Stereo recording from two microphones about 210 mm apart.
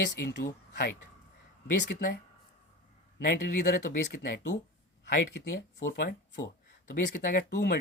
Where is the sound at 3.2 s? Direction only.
40° left (ahead or behind).